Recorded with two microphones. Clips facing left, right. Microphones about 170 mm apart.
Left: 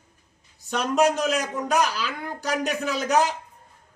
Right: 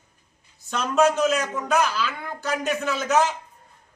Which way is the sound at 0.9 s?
15° left (ahead or behind).